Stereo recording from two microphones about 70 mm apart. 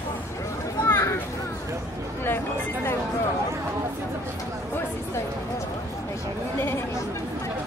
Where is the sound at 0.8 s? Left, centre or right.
Left.